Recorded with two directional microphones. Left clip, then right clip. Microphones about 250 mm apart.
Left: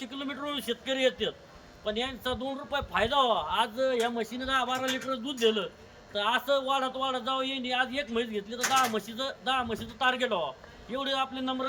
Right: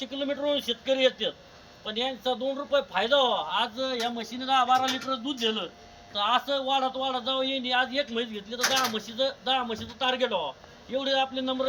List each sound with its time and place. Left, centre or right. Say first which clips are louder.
0.0 s a man's voice: right 7 dB; centre